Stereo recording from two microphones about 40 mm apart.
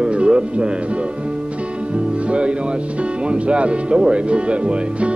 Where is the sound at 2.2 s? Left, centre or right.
Right.